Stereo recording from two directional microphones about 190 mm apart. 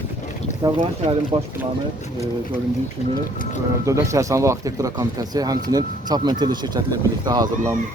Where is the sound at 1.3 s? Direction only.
30° right (ahead or behind).